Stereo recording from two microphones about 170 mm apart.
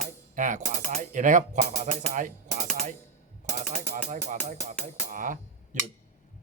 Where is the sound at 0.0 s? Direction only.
45° right (ahead or behind).